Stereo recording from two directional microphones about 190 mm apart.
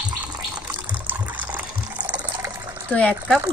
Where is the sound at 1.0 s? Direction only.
10° right (ahead or behind).